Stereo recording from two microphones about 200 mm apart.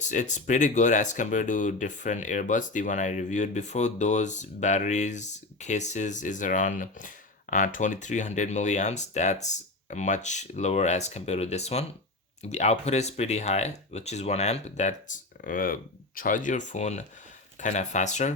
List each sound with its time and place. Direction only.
0.0 s speech: 35° left (ahead or behind)